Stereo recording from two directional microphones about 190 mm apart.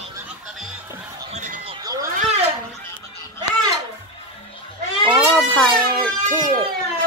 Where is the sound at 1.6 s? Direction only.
20° right (ahead or behind).